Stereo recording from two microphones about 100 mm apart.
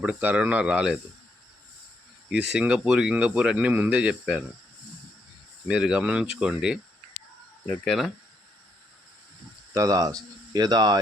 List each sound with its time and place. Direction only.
0.0 s speech: 10° right (ahead or behind)
2.3 s speech: 10° right (ahead or behind)
5.6 s speech: 5° right (ahead or behind)
7.9 s speech: centre (ahead or behind)
9.7 s speech: 35° right (ahead or behind)